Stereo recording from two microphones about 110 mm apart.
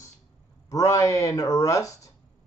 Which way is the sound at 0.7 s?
30° left (ahead or behind).